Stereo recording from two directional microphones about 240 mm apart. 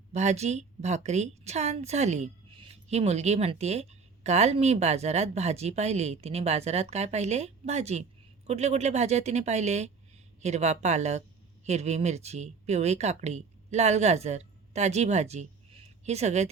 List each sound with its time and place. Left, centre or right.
0.1 s a woman's voice: right